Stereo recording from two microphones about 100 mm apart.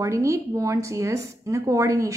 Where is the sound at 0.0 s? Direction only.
30° right (ahead or behind).